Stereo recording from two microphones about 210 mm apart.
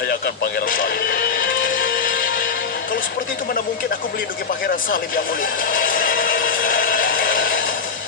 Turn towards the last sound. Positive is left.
turn(degrees=40)  # may be behind; listen again after turning